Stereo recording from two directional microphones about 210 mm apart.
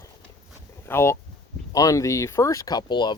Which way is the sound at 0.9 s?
10° left (ahead or behind).